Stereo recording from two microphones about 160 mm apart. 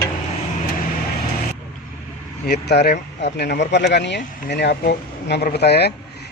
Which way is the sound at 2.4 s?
90° left.